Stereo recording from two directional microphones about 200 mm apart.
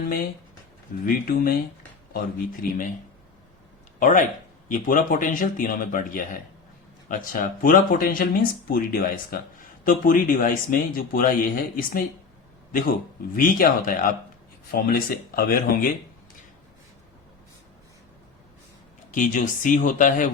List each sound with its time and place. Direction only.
1.0 s speech: 45° left (ahead or behind)
4.0 s speech: 40° left (ahead or behind)
19.1 s speech: 40° left (ahead or behind)